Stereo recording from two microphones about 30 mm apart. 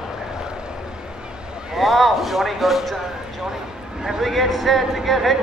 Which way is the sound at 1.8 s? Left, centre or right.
Centre.